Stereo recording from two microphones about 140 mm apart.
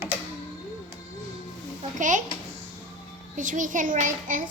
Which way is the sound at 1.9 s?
65° right (ahead or behind).